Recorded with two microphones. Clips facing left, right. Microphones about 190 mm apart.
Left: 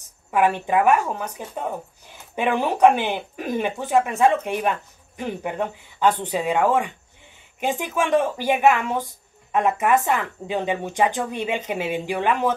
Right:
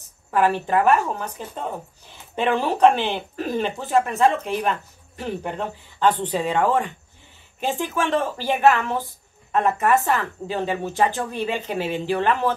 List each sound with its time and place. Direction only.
0.3 s speech: 15° left (ahead or behind)